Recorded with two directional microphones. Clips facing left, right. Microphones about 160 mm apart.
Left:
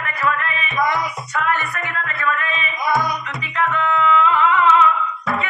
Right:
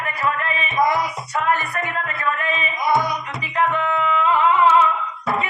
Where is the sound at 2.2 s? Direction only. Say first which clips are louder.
Left 1 dB; 35° right (ahead or behind).